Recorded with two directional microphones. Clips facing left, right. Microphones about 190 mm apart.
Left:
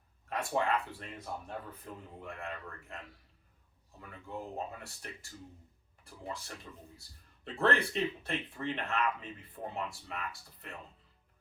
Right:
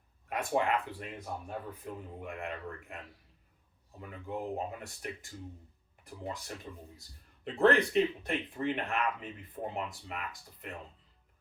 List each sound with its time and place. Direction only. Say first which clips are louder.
0.3 s speech: right 2 dB; 15° right (ahead or behind)
4.1 s speech: right 5 dB; 15° right (ahead or behind)
6.7 s a man's voice: right 4 dB; 20° right (ahead or behind)